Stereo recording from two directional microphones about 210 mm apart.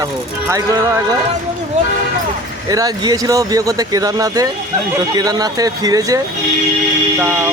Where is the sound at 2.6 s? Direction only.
15° right (ahead or behind).